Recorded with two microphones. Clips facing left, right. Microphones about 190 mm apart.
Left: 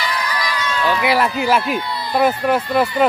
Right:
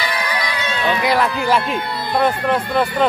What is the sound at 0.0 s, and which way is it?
Crowd, 60° right (ahead or behind).